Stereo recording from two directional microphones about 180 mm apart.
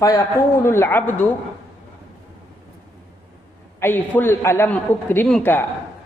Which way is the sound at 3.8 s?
10° left (ahead or behind).